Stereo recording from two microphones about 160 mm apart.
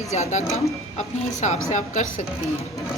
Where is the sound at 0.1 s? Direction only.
45° left (ahead or behind).